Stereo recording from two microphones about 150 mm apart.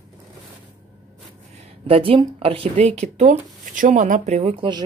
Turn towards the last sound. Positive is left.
turn(degrees=-35)  # may be behind; listen again after turning